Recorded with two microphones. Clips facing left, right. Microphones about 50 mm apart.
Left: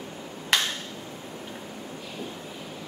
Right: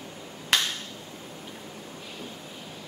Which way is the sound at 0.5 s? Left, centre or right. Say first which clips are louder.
Left 1 dB; centre.